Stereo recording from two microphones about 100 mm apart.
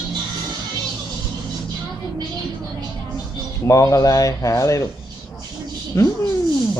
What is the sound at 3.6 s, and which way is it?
Speech, 35° left (ahead or behind).